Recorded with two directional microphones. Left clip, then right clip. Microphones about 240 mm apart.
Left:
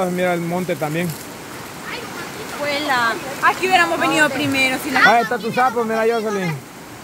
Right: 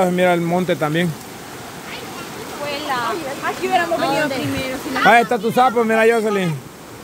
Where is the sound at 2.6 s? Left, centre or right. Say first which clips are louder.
Left 4 dB; left.